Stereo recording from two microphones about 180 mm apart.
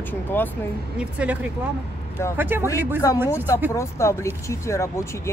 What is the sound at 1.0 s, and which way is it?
Speech, 5° right (ahead or behind).